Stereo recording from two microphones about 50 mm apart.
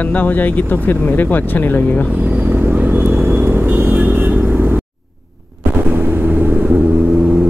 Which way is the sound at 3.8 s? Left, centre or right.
Right.